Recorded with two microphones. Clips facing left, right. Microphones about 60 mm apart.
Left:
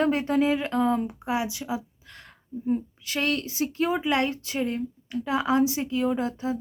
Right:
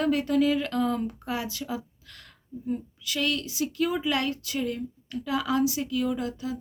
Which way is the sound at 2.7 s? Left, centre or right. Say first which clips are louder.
Left 4 dB; left.